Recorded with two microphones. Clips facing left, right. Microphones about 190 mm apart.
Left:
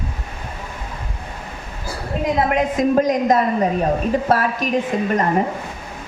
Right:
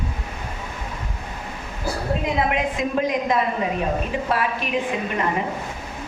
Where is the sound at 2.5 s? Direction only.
45° left (ahead or behind).